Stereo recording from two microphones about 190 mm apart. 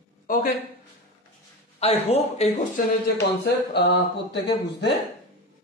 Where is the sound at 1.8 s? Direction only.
30° left (ahead or behind).